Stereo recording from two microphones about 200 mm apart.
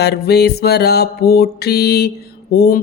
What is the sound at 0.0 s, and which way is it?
Mantra, 55° left (ahead or behind).